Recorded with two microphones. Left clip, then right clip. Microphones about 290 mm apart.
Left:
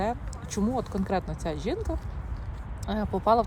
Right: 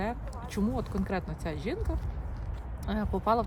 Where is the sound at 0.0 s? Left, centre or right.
Centre.